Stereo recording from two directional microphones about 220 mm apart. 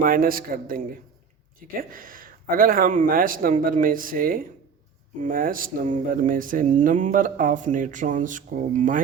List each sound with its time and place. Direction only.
0.0 s speech: 40° right (ahead or behind)